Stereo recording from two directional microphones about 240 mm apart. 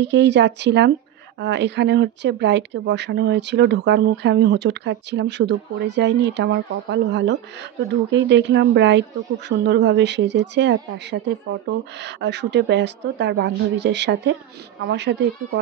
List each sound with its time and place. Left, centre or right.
0.0 s speech: right